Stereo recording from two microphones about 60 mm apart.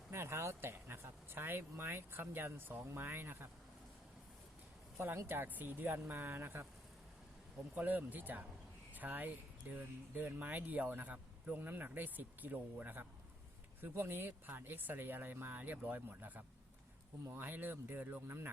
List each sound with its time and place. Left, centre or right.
0.1 s speech: right
4.9 s speech: right
7.8 s speech: right